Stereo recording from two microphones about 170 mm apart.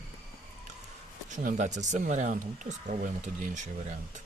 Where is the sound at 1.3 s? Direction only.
50° right (ahead or behind).